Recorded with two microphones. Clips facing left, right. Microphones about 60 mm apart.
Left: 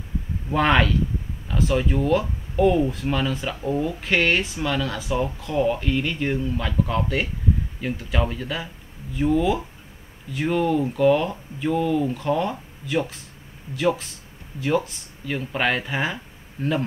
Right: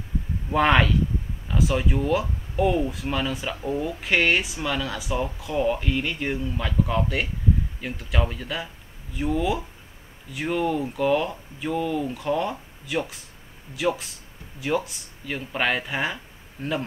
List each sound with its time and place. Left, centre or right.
0.5 s speech: centre